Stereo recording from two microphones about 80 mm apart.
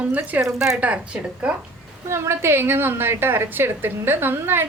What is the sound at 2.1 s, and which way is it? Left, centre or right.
A woman's voice, right.